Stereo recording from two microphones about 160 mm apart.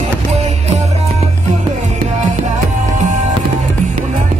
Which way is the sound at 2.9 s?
50° right (ahead or behind).